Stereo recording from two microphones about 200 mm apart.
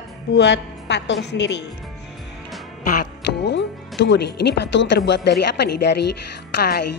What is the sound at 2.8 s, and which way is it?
A woman's voice, 50° left (ahead or behind).